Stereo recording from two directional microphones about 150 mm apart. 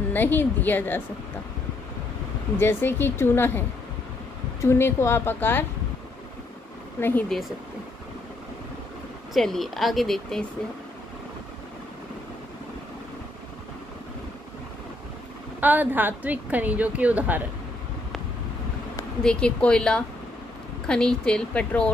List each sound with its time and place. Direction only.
0.1 s a woman's voice: 10° left (ahead or behind)
2.6 s a woman's voice: 15° left (ahead or behind)
7.0 s a woman's voice: 15° left (ahead or behind)
7.2 s a woman's voice: centre (ahead or behind)
9.3 s a woman's voice: centre (ahead or behind)
15.6 s a woman's voice: 10° right (ahead or behind)
19.2 s a woman's voice: 5° left (ahead or behind)